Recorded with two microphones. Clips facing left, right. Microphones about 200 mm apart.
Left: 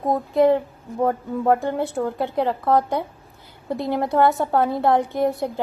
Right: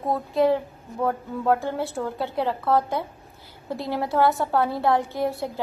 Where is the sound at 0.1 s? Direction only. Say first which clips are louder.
Left 4 dB; 20° left (ahead or behind).